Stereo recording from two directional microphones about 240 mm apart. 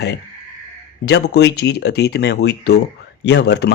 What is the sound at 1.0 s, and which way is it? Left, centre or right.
Speech, left.